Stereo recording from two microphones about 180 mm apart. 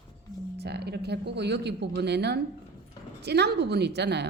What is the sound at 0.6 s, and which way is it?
Speech, 65° right (ahead or behind).